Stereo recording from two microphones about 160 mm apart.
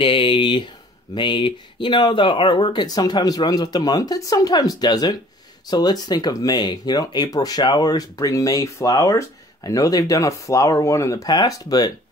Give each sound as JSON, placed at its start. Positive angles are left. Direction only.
{"t": 0.0, "sound": "speech", "side_deg": 35}